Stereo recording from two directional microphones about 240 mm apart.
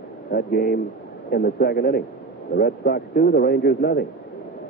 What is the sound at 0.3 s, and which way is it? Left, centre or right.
Speech, left.